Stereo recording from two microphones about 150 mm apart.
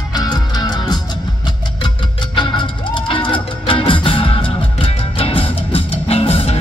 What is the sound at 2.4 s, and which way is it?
Music, 30° left (ahead or behind).